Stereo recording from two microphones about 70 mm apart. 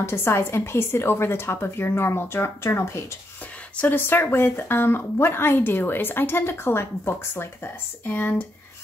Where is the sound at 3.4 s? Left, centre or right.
Left.